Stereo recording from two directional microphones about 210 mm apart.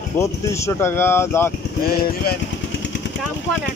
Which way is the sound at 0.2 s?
15° left (ahead or behind).